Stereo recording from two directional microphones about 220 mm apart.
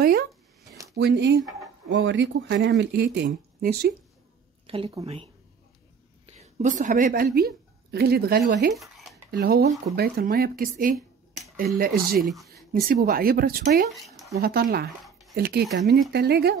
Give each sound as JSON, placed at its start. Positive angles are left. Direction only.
{"t": 0.9, "sound": "speech", "side_deg": -50}
{"t": 4.6, "sound": "speech", "side_deg": -25}
{"t": 6.3, "sound": "a woman's voice", "side_deg": -30}
{"t": 8.7, "sound": "a sound", "side_deg": 0}
{"t": 9.3, "sound": "speech", "side_deg": -45}
{"t": 12.2, "sound": "speech", "side_deg": 0}
{"t": 12.7, "sound": "speech", "side_deg": -40}
{"t": 13.8, "sound": "a sound", "side_deg": 0}
{"t": 14.3, "sound": "speech", "side_deg": -45}